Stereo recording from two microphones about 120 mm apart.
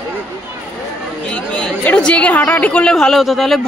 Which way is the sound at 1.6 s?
10° left (ahead or behind).